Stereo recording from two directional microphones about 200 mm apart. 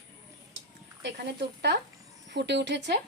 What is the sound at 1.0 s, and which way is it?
Speech, 55° right (ahead or behind).